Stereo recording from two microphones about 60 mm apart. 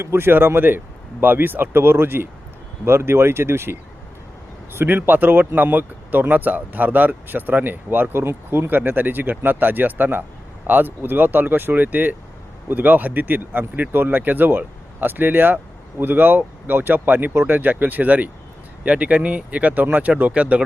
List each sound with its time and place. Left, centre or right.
0.0 s speech: right